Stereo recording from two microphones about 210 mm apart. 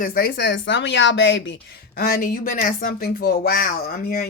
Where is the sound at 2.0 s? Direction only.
45° left (ahead or behind).